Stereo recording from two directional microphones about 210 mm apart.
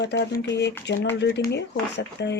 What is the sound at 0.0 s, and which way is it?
Speech, 55° left (ahead or behind).